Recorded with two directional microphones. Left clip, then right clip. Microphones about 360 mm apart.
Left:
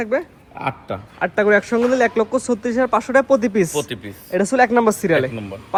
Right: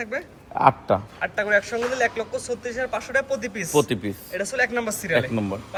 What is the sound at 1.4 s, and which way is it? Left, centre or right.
Speech, centre.